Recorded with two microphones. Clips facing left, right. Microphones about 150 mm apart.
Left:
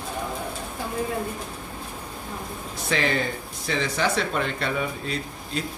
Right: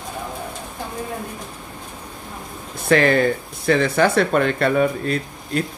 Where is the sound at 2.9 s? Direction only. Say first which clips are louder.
Right 9 dB; 55° right (ahead or behind).